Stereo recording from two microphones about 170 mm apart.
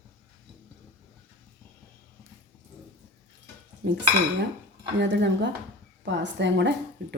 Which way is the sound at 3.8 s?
90° right.